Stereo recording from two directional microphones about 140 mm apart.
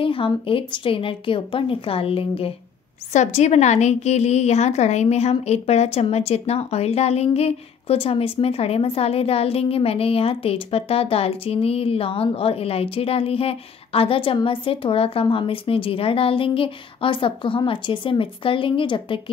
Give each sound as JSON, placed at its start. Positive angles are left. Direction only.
{"t": 0.0, "sound": "a woman's voice", "side_deg": 40}
{"t": 3.1, "sound": "a woman's voice", "side_deg": 55}